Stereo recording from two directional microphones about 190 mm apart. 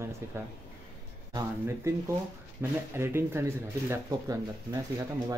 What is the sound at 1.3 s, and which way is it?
Speech, 15° right (ahead or behind).